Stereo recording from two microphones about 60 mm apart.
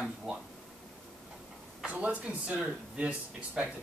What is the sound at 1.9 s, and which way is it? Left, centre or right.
A man's voice, right.